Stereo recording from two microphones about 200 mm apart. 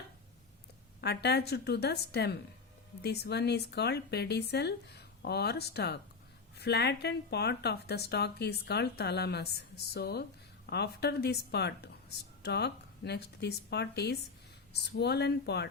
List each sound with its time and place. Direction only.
1.0 s speech: 55° left (ahead or behind)